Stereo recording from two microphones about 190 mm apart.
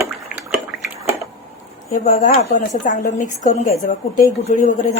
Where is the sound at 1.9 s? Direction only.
40° left (ahead or behind).